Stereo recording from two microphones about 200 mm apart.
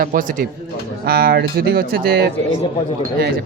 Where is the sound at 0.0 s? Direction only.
40° right (ahead or behind).